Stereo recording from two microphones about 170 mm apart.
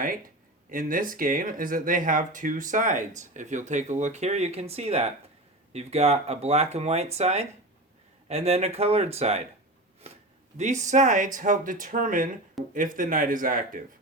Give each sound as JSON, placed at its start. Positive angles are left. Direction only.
{"t": 0.7, "sound": "speech", "side_deg": -55}
{"t": 10.6, "sound": "speech", "side_deg": -45}